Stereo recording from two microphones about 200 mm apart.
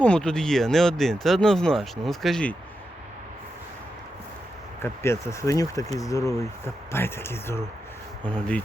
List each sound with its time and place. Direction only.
0.0 s speech: 5° left (ahead or behind)
4.8 s speech: 15° left (ahead or behind)